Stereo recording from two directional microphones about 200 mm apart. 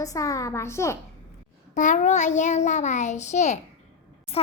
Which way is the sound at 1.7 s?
35° left (ahead or behind).